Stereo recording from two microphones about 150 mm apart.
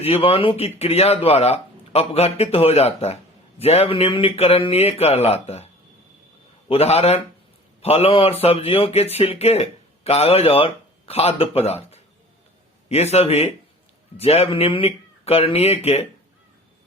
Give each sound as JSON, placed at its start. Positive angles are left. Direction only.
{"t": 0.0, "sound": "speech", "side_deg": 40}
{"t": 6.7, "sound": "speech", "side_deg": 45}